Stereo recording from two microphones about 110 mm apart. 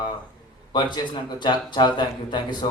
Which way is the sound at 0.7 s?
40° left (ahead or behind).